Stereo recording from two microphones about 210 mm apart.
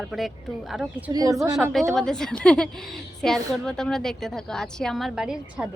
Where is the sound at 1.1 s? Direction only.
15° right (ahead or behind).